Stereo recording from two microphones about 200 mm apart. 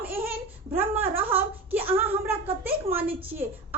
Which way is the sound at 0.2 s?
10° right (ahead or behind).